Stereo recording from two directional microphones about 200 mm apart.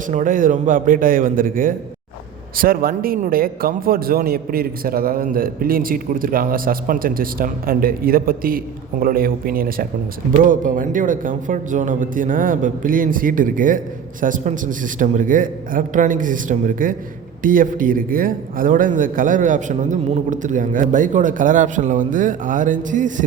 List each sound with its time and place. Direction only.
0.1 s a man's voice: 40° right (ahead or behind)